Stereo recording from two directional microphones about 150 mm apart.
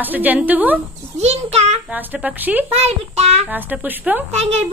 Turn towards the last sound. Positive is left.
turn(degrees=-45)  # may be behind; listen again after turning